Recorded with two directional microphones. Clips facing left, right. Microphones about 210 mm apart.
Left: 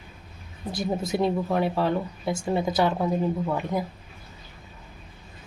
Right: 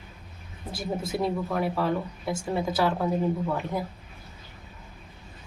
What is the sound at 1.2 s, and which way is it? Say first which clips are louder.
Speech: left 4 dB; 25° left (ahead or behind).